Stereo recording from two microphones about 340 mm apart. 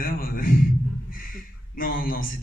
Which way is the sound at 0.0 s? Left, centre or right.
Left.